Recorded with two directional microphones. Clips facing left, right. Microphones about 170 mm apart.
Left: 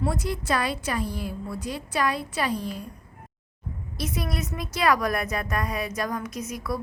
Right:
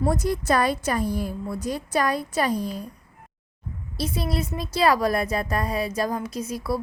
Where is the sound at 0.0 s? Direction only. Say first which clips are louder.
Right 4 dB; 45° right (ahead or behind).